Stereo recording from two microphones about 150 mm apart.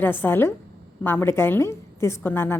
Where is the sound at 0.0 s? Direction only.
15° left (ahead or behind).